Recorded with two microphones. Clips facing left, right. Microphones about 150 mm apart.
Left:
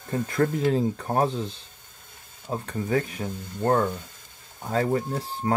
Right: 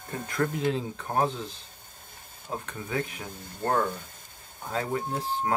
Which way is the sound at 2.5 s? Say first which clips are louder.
Left 6 dB; 35° left (ahead or behind).